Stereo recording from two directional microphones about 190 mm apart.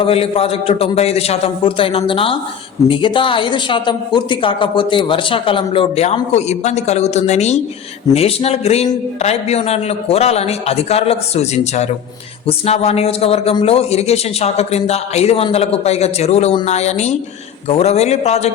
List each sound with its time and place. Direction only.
0.0 s a man's voice: 30° left (ahead or behind)